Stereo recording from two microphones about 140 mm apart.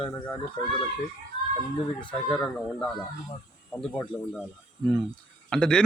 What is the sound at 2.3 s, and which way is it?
A man's voice, 5° left (ahead or behind).